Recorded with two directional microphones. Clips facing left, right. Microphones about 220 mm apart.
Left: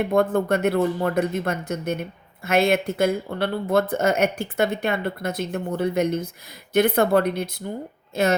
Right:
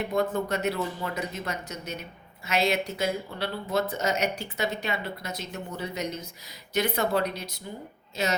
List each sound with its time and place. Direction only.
0.0 s a woman's voice: 55° left (ahead or behind)